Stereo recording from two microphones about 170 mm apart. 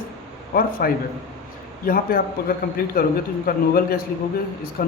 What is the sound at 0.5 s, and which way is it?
Speech, 60° left (ahead or behind).